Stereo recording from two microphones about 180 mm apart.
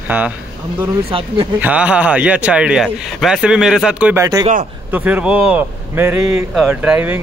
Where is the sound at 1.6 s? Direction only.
5° right (ahead or behind).